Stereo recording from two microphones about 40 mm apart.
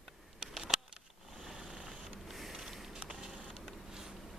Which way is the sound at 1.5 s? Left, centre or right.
Right.